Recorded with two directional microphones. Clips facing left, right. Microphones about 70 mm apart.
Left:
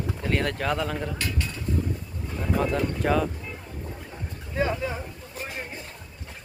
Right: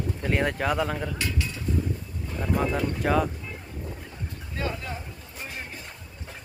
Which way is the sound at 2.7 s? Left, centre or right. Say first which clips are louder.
Even; centre.